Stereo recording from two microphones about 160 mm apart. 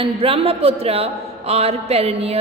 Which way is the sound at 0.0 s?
35° right (ahead or behind).